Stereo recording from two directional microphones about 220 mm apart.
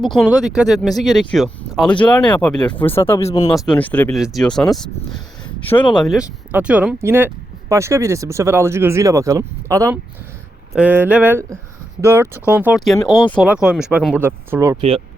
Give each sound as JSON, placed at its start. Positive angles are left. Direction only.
{"t": 0.0, "sound": "speech", "side_deg": 0}
{"t": 3.5, "sound": "speech", "side_deg": 5}
{"t": 5.9, "sound": "speech", "side_deg": 0}
{"t": 14.8, "sound": "speech", "side_deg": -25}